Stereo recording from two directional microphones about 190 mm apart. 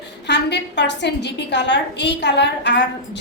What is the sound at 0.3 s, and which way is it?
A woman's voice, 65° left (ahead or behind).